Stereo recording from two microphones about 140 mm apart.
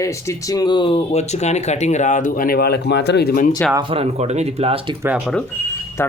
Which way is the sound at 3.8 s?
45° right (ahead or behind).